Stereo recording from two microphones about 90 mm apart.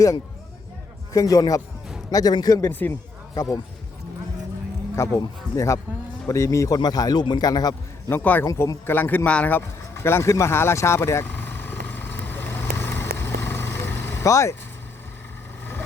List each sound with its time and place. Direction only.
1.1 s a man's voice: 40° left (ahead or behind)
2.6 s speech: 20° left (ahead or behind)
4.9 s speech: 35° left (ahead or behind)
6.7 s a man's voice: 45° left (ahead or behind)
8.1 s speech: 20° left (ahead or behind)
8.5 s a sound: 30° left (ahead or behind)
14.3 s speech: 35° left (ahead or behind)